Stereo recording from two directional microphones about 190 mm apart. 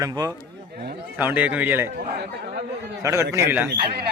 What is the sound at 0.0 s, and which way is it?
A man's voice, 20° right (ahead or behind).